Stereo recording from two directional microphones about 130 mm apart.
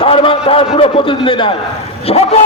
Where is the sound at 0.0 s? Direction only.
45° left (ahead or behind).